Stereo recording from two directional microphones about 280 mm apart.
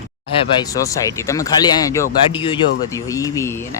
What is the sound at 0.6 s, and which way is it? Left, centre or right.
Speech, centre.